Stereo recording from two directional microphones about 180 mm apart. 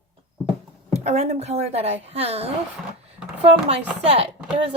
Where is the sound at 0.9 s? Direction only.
35° right (ahead or behind).